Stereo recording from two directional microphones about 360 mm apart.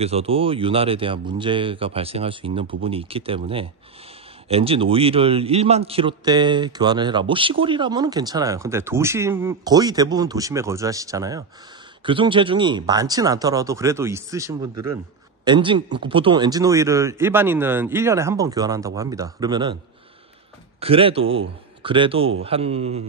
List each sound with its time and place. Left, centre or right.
0.0 s a man's voice: centre
20.8 s a man's voice: centre